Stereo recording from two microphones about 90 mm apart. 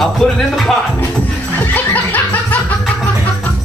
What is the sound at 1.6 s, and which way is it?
Snicker, 20° left (ahead or behind).